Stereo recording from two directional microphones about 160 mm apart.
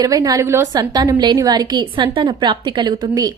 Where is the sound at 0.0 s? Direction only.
25° right (ahead or behind).